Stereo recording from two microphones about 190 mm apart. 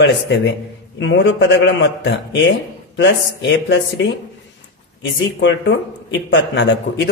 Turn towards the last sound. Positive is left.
turn(degrees=70)  # may be behind; listen again after turning